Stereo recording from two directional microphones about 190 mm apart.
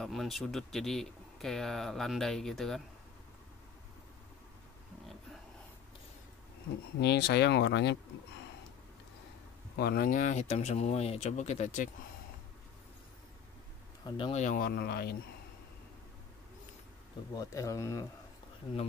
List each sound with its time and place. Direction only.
0.0 s speech: centre (ahead or behind)
7.0 s speech: 60° left (ahead or behind)
9.8 s speech: 55° left (ahead or behind)
14.1 s speech: 25° left (ahead or behind)
14.4 s speech: 50° left (ahead or behind)
17.3 s speech: 15° left (ahead or behind)